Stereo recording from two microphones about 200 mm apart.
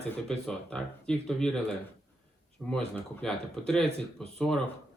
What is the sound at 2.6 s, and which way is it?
Speech, 5° left (ahead or behind).